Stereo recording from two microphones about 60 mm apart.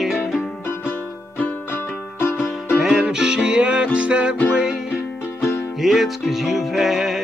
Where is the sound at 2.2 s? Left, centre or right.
Left.